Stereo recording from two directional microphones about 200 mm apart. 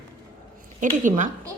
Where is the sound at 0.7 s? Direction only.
40° right (ahead or behind).